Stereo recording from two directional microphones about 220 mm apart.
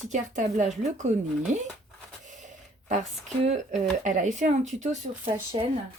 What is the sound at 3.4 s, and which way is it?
Speech, 30° right (ahead or behind).